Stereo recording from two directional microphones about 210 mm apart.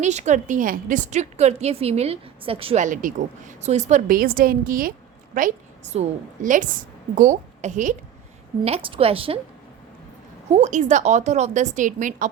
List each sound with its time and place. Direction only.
0.0 s a woman's voice: 35° right (ahead or behind)
10.5 s a woman's voice: 35° right (ahead or behind)